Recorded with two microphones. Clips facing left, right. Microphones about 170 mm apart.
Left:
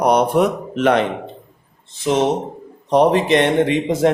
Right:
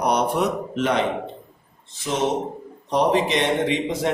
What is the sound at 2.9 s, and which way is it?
A man's voice, 55° left (ahead or behind).